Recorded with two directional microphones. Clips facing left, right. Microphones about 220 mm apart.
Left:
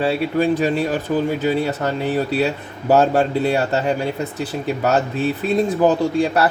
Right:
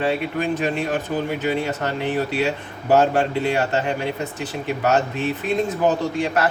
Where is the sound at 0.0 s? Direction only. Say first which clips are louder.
Left 4 dB; 35° left (ahead or behind).